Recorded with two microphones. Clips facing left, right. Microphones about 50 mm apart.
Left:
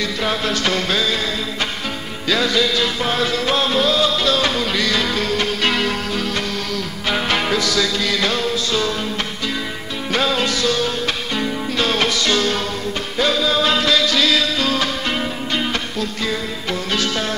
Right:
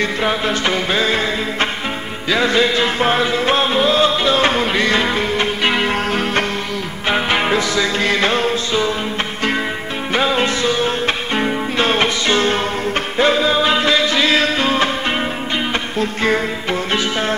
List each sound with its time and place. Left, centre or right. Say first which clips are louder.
0.2 s music: right 2 dB; right
1.0 s music: right 4 dB; right
7.1 s music: right 3 dB; right
10.1 s music: right 2 dB; right
16.0 s music: right 9 dB; right